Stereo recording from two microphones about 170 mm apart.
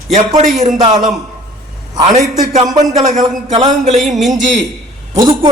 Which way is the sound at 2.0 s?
40° right (ahead or behind).